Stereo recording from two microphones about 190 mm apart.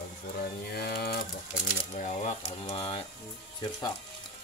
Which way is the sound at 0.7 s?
55° left (ahead or behind).